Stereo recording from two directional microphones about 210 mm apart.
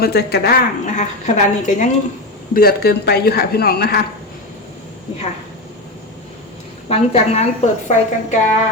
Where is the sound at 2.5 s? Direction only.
45° left (ahead or behind).